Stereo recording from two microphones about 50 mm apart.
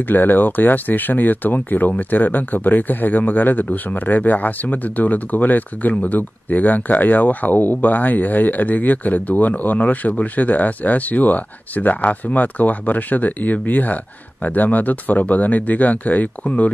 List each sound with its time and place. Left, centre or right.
0.1 s speech: left